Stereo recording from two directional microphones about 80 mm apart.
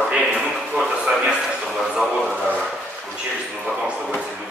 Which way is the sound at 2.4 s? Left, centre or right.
Centre.